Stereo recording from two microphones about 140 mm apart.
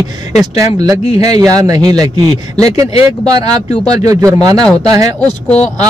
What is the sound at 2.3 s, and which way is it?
Speech, 50° left (ahead or behind).